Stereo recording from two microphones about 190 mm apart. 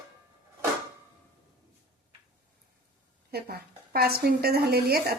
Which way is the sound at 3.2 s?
55° right (ahead or behind).